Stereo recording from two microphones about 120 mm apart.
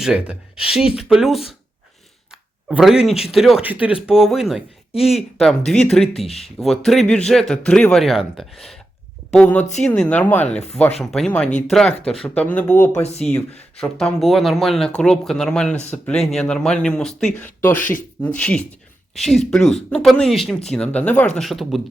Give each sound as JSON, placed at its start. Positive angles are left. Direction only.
{"t": 0.0, "sound": "speech", "side_deg": -5}
{"t": 3.6, "sound": "speech", "side_deg": -10}
{"t": 13.0, "sound": "speech", "side_deg": 65}
{"t": 13.7, "sound": "speech", "side_deg": 5}
{"t": 17.3, "sound": "speech", "side_deg": 15}